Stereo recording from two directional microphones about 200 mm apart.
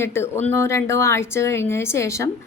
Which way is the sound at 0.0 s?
10° left (ahead or behind).